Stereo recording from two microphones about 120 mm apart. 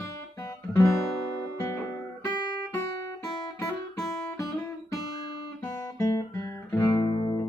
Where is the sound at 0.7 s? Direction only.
25° left (ahead or behind).